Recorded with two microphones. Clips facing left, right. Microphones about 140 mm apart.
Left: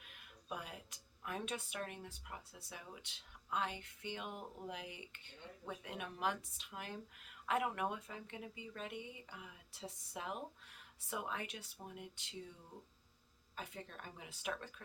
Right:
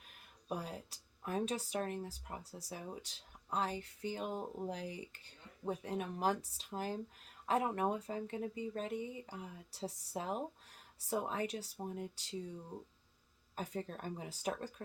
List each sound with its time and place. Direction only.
0.1 s speech: 35° right (ahead or behind)
13.6 s speech: 40° right (ahead or behind)